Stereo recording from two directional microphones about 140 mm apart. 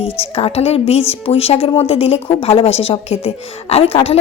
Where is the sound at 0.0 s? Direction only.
45° left (ahead or behind).